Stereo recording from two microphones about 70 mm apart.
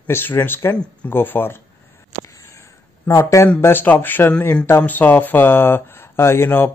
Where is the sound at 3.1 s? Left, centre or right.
Left.